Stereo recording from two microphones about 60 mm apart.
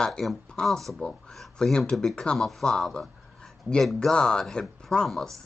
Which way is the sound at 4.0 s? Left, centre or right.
Centre.